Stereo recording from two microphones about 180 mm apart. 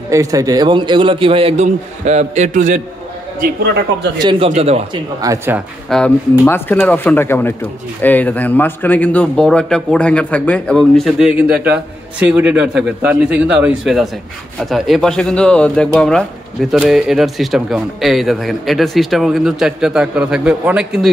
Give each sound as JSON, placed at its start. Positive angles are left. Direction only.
{"t": 0.1, "sound": "a man's voice", "side_deg": -20}
{"t": 4.2, "sound": "a man's voice", "side_deg": -25}
{"t": 5.2, "sound": "speech", "side_deg": -15}
{"t": 5.9, "sound": "a man's voice", "side_deg": 5}